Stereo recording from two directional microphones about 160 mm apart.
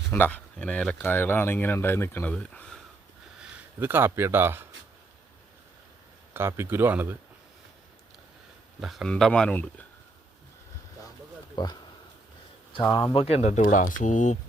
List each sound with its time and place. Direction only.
0.1 s speech: 10° left (ahead or behind)
3.8 s speech: 10° right (ahead or behind)
6.3 s speech: 15° right (ahead or behind)
8.8 s speech: centre (ahead or behind)
11.5 s speech: 25° left (ahead or behind)
13.1 s speech: 40° left (ahead or behind)